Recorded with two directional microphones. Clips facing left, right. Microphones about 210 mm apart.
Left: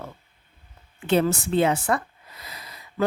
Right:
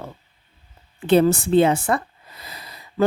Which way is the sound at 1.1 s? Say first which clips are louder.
Right 5 dB; 35° right (ahead or behind).